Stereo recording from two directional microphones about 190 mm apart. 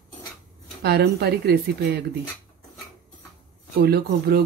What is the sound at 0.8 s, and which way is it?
Speech, 60° right (ahead or behind).